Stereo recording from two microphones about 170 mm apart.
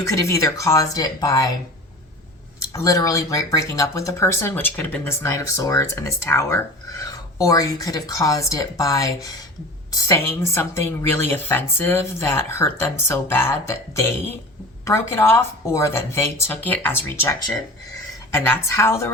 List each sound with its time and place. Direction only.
0.0 s speech: 20° left (ahead or behind)
2.7 s speech: 20° left (ahead or behind)
18.3 s speech: 15° left (ahead or behind)